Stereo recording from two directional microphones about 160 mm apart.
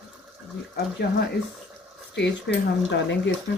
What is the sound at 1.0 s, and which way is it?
Speech, 90° left.